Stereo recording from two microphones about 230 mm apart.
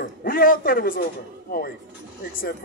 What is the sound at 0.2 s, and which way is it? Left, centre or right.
Speech, left.